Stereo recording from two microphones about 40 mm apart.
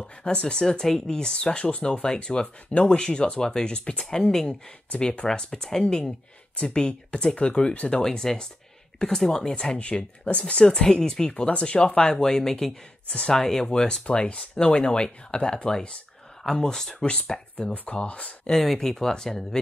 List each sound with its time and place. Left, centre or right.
0.2 s speech: left
0.6 s speech: centre
2.4 s speech: left
2.9 s speech: left
4.9 s speech: left
8.0 s speech: centre
9.6 s speech: left
10.3 s speech: left
10.6 s speech: centre; by 14.9 s left
14.9 s speech: left
17.0 s speech: left
18.5 s speech: centre